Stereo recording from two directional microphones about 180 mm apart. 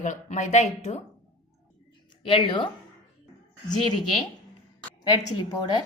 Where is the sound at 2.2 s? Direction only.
25° left (ahead or behind).